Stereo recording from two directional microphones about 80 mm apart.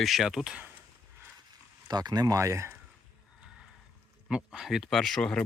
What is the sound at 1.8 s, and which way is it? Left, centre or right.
Speech, right.